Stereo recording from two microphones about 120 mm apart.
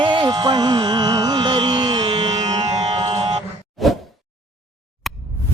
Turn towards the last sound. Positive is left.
turn(degrees=0)  # may be behind; listen again after turning